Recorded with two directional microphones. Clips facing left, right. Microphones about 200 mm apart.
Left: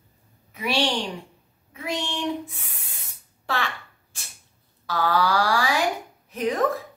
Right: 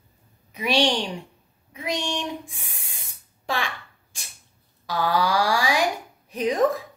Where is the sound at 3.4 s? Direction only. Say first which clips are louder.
Even; 15° right (ahead or behind).